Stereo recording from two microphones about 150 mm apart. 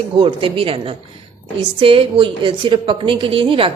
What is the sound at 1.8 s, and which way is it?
A woman's voice, 35° right (ahead or behind).